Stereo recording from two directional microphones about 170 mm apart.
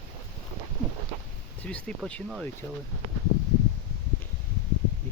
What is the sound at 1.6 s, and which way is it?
Speech, 5° left (ahead or behind).